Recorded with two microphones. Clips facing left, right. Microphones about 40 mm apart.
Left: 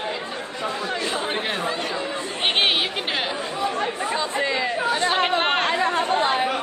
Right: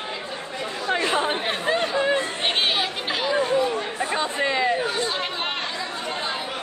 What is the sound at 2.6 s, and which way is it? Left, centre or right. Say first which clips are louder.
Chatter: left 4 dB; left.